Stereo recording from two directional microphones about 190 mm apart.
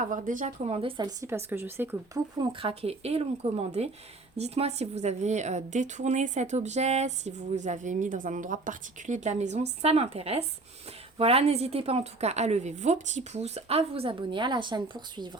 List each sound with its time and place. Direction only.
0.0 s speech: 45° right (ahead or behind); by 2.2 s 10° right (ahead or behind)
2.4 s a woman's voice: 25° right (ahead or behind)